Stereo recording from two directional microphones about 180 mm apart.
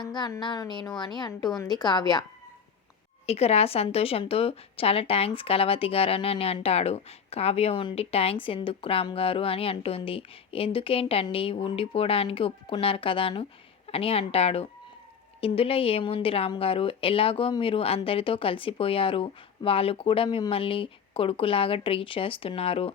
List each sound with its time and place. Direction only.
0.0 s a woman's voice: 25° left (ahead or behind)
3.2 s a woman's voice: 35° left (ahead or behind)